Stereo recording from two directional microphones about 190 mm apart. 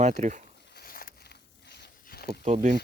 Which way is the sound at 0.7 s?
50° left (ahead or behind).